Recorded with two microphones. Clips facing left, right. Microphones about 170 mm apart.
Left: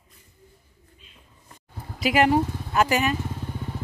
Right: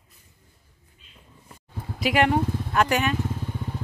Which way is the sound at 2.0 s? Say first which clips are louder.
Left 1 dB; centre (ahead or behind).